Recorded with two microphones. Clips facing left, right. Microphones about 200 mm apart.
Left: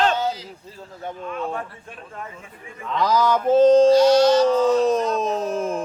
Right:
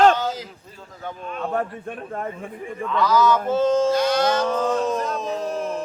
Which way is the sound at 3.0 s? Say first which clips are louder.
Even; 35° left (ahead or behind).